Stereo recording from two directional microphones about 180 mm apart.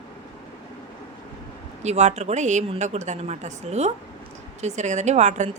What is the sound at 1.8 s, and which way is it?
A woman's voice, 40° right (ahead or behind).